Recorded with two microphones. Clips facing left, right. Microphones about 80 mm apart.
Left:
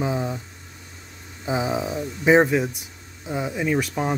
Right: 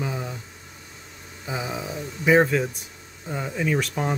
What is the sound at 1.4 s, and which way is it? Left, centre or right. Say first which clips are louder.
Speech: left 6 dB; left.